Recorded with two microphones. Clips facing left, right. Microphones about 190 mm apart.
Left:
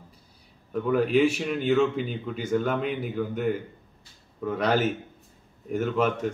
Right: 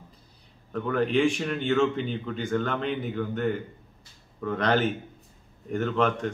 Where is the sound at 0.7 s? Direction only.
5° left (ahead or behind).